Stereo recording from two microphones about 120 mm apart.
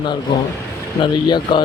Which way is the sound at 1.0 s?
40° left (ahead or behind).